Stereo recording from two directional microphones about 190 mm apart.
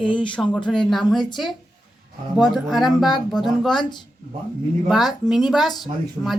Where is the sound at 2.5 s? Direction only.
Centre (ahead or behind).